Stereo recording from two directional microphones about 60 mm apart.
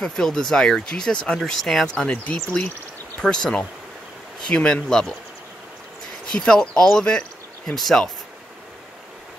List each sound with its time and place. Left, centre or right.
0.0 s speech: centre
2.3 s speech: left
3.2 s speech: centre
6.2 s speech: centre
6.9 s a sound: centre
7.7 s speech: centre